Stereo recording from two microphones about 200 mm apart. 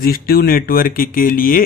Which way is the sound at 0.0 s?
45° left (ahead or behind).